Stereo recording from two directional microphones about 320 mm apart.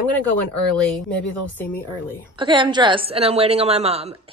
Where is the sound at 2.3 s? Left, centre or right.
Centre.